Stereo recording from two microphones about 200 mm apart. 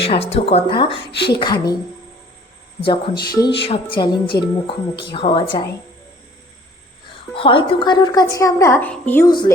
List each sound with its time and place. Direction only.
0.1 s speech: 30° left (ahead or behind)
2.8 s speech: 25° left (ahead or behind)
7.3 s a woman's voice: 25° left (ahead or behind); by 9.3 s 10° left (ahead or behind)